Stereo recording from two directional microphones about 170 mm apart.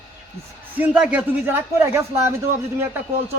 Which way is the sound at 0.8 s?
5° right (ahead or behind).